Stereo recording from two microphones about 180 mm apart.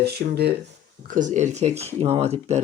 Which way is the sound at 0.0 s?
60° right (ahead or behind).